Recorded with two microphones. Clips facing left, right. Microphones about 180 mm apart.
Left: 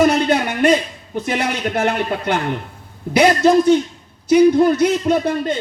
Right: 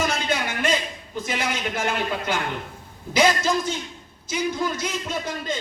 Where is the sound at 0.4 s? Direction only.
65° left (ahead or behind).